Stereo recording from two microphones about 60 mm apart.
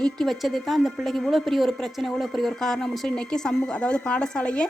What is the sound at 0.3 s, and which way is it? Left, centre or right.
A woman's voice, centre.